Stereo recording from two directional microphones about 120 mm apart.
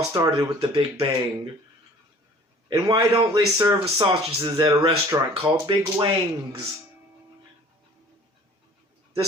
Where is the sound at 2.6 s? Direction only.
35° right (ahead or behind).